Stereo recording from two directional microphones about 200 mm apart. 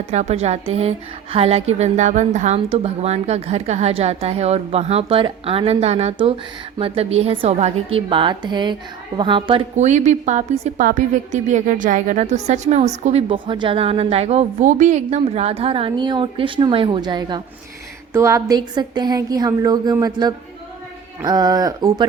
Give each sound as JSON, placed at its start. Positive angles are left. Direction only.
{"t": 0.1, "sound": "a woman's voice", "side_deg": -35}